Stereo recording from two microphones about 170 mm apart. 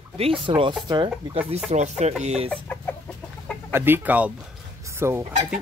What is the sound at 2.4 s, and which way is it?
Chicken, 10° left (ahead or behind).